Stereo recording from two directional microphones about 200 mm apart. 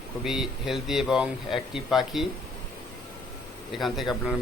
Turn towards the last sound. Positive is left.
turn(degrees=0)  # may be behind; listen again after turning